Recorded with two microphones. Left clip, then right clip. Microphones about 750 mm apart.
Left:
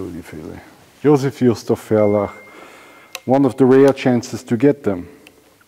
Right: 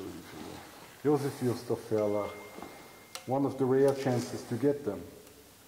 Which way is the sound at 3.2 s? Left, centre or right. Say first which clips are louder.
Left 16 dB; left.